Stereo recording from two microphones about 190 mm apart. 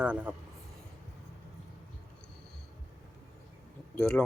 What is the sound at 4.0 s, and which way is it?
Speech, 5° left (ahead or behind).